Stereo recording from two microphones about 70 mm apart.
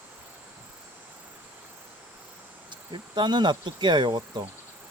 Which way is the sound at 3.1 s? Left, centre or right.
Right.